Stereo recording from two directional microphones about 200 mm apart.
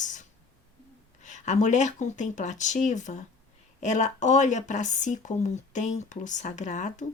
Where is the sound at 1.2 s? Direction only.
35° left (ahead or behind).